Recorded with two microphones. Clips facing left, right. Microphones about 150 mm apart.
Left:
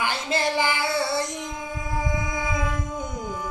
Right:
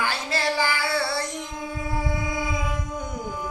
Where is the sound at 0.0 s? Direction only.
20° left (ahead or behind).